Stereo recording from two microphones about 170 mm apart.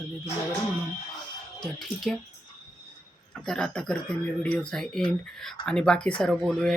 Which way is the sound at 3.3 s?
5° left (ahead or behind).